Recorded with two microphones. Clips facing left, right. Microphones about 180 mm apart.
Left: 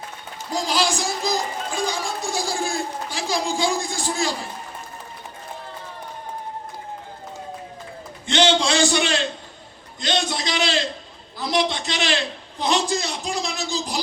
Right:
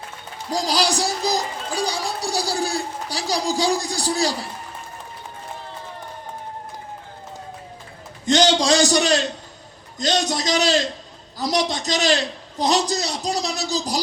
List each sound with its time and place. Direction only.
0.5 s music: 35° right (ahead or behind)
8.3 s a sound: 40° right (ahead or behind)
10.0 s a man's voice: 40° right (ahead or behind)